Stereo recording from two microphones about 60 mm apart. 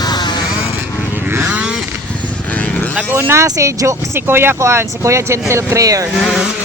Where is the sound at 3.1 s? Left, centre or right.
Right.